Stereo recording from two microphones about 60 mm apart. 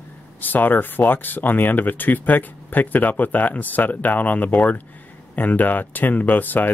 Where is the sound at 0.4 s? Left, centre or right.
Left.